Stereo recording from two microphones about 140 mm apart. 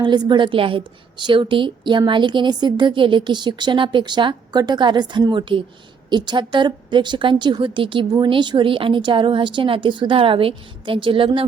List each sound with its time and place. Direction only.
0.0 s a woman's voice: 35° right (ahead or behind)